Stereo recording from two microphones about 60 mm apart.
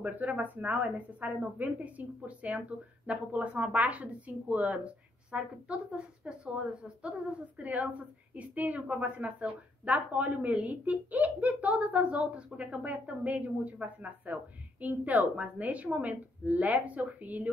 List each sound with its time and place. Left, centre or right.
0.0 s a woman's voice: right